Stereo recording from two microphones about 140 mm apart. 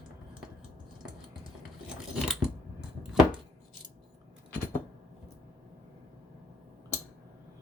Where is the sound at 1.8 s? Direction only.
5° right (ahead or behind).